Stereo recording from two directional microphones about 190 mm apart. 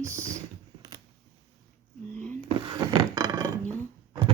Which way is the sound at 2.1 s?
10° left (ahead or behind).